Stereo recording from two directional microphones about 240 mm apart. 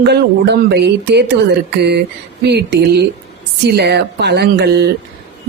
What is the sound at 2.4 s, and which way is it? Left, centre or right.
Speech, right.